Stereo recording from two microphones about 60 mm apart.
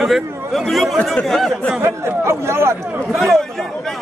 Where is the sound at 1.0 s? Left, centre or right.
Centre.